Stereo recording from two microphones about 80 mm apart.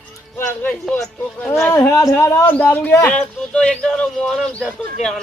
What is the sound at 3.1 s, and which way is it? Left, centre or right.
Speech, centre.